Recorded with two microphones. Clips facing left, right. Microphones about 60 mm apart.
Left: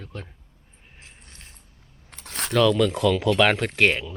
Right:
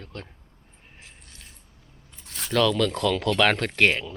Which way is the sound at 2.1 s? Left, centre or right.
Left.